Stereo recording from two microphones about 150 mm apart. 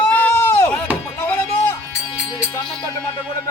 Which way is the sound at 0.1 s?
10° left (ahead or behind).